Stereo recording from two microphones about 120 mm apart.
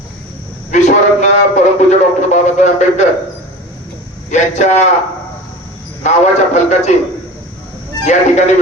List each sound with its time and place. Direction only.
0.7 s a man's voice: 80° left
4.3 s a man's voice: 75° left (ahead or behind)
6.0 s a man's voice: 70° left (ahead or behind)
8.0 s a man's voice: 70° left (ahead or behind)